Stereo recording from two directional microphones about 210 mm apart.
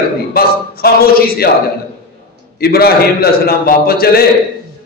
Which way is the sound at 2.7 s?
45° left (ahead or behind).